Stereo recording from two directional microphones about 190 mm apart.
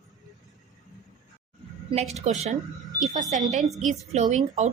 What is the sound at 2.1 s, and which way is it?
Speech, 35° right (ahead or behind).